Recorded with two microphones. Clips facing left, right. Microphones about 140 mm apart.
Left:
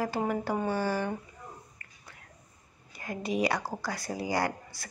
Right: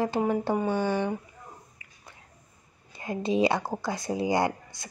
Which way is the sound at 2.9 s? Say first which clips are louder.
Right 5 dB; 25° right (ahead or behind).